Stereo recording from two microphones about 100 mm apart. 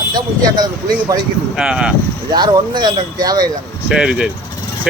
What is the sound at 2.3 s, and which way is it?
Speech, 45° right (ahead or behind).